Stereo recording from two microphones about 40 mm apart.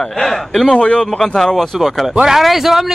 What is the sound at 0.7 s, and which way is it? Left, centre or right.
Speech, left.